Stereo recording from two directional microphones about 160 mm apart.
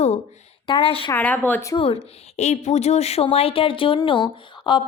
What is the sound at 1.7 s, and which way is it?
A woman's voice, 35° left (ahead or behind).